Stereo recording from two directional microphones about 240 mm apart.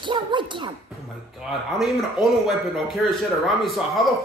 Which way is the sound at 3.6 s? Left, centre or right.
Centre.